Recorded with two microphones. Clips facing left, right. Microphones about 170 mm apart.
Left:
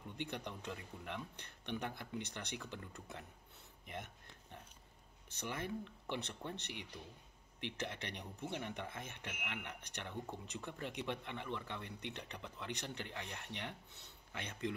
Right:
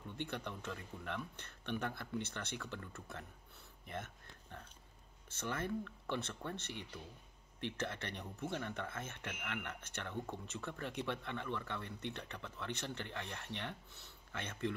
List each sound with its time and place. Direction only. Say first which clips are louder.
0.2 s speech: right 1 dB; 15° left (ahead or behind)
3.8 s a sound: right 2 dB; 15° left (ahead or behind)
5.3 s speech: right 3 dB; 15° left (ahead or behind)